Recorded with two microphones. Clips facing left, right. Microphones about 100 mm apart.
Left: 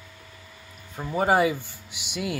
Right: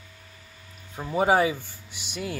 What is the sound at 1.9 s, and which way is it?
Speech, 70° left (ahead or behind).